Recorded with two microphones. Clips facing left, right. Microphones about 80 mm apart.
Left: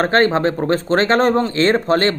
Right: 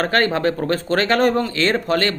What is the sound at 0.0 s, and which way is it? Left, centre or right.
Speech, left.